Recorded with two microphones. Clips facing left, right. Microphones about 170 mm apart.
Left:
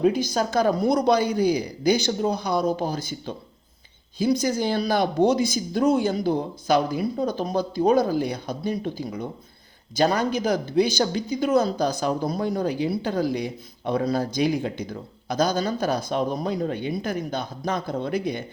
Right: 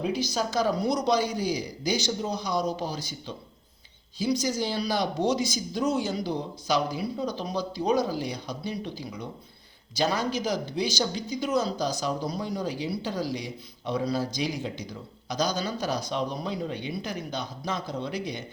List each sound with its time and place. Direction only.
0.0 s a man's voice: 50° left (ahead or behind)